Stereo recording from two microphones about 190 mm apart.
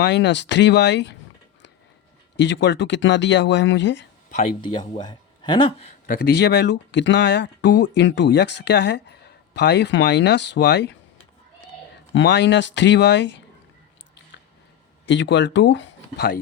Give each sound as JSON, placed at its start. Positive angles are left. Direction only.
{"t": 0.0, "sound": "speech", "side_deg": 65}
{"t": 2.3, "sound": "speech", "side_deg": 70}
{"t": 4.3, "sound": "speech", "side_deg": 40}
{"t": 4.9, "sound": "speech", "side_deg": 25}
{"t": 6.1, "sound": "speech", "side_deg": 55}
{"t": 12.1, "sound": "speech", "side_deg": 70}
{"t": 15.0, "sound": "speech", "side_deg": 70}